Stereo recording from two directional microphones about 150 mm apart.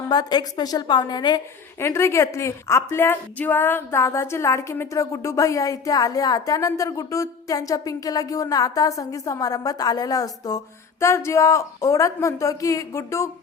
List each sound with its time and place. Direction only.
0.1 s a woman's voice: 30° left (ahead or behind)